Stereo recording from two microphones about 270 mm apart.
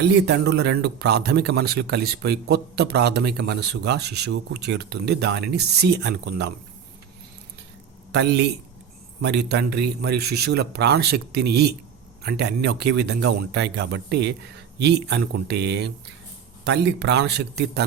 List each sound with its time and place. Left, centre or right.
0.0 s a man's voice: right
8.1 s a man's voice: right